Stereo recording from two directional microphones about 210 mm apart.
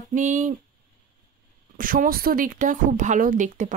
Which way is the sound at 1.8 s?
40° right (ahead or behind).